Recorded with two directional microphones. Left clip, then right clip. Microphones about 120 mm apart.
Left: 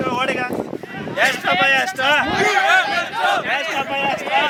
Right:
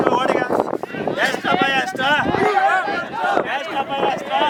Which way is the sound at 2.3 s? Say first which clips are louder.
Even; 20° left (ahead or behind).